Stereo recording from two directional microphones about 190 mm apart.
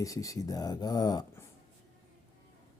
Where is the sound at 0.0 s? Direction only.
15° left (ahead or behind).